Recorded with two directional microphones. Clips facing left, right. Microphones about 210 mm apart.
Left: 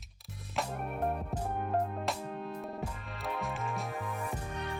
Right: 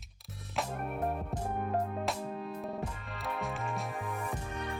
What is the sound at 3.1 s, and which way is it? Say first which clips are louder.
Music: left 1 dB; centre (ahead or behind).